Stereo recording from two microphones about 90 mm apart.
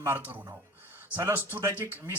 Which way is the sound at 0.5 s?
20° right (ahead or behind).